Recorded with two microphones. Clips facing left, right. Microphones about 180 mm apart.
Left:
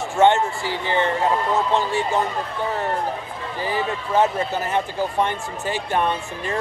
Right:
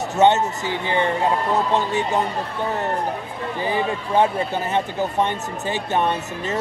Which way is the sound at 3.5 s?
20° right (ahead or behind).